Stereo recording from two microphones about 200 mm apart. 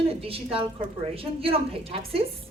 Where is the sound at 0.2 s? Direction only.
30° right (ahead or behind).